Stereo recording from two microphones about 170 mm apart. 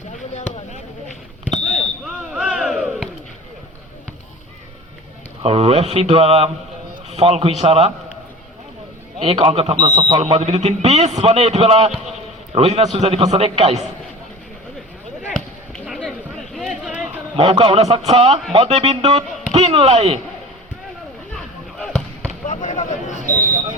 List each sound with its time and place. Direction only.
2.0 s a sound: 5° right (ahead or behind)
5.4 s a man's voice: 35° right (ahead or behind)
9.1 s a man's voice: 35° right (ahead or behind)
15.3 s chop: 5° left (ahead or behind)
17.3 s a man's voice: 35° right (ahead or behind)
21.3 s basketball bounce: 5° left (ahead or behind)
22.4 s a sound: 45° left (ahead or behind)
23.3 s speech: 45° left (ahead or behind)